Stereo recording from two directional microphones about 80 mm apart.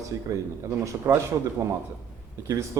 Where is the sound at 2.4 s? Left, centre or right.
Right.